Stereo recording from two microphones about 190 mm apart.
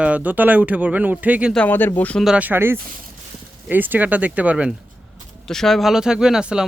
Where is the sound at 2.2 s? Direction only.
5° right (ahead or behind).